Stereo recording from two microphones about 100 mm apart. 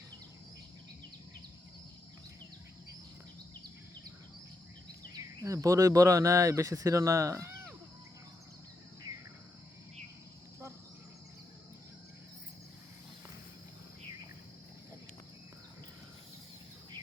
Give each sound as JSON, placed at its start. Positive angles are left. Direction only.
{"t": 5.1, "sound": "speech", "side_deg": -35}